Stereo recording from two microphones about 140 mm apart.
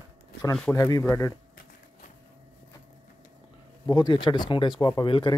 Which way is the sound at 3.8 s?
30° left (ahead or behind).